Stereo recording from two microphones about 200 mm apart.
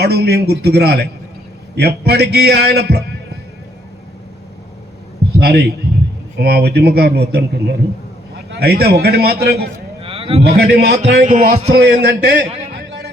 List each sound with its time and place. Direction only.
0.0 s a man's voice: 55° right (ahead or behind)
5.4 s speech: 55° right (ahead or behind)
10.0 s a man's voice: 25° right (ahead or behind)
10.8 s a man's voice: 55° right (ahead or behind)
11.2 s speech: 40° right (ahead or behind)
11.8 s a man's voice: 55° right (ahead or behind)